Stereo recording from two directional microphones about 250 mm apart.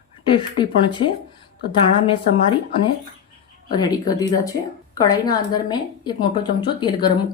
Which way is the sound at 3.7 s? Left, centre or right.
Centre.